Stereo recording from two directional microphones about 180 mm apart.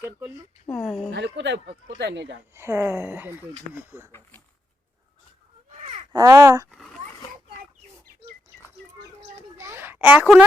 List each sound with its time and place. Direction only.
0.7 s speech: centre (ahead or behind)
1.1 s speech: 75° right (ahead or behind)
2.6 s speech: 15° right (ahead or behind)
5.7 s a sound: 40° right (ahead or behind)
6.1 s speech: 20° right (ahead or behind)
6.7 s dog: centre (ahead or behind)
9.6 s a sound: 15° right (ahead or behind)